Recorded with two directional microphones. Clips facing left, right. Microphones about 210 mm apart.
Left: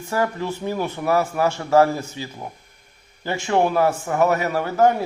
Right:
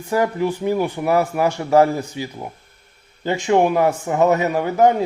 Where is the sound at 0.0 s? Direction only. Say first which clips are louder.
Right 4 dB; 15° right (ahead or behind).